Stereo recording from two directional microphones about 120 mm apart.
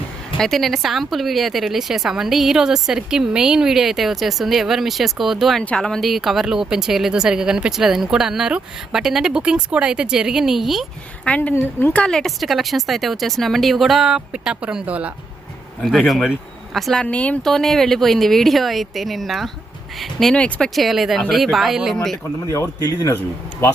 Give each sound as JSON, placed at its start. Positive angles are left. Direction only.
{"t": 0.3, "sound": "a woman's voice", "side_deg": 0}
{"t": 11.3, "sound": "a woman's voice", "side_deg": 15}
{"t": 15.8, "sound": "a woman's voice", "side_deg": 0}
{"t": 22.4, "sound": "speech", "side_deg": 25}